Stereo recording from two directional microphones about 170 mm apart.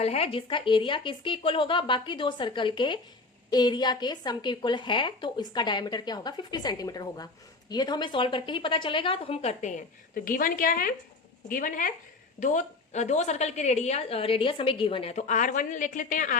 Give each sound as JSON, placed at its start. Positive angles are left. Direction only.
{"t": 0.0, "sound": "a woman's voice", "side_deg": 35}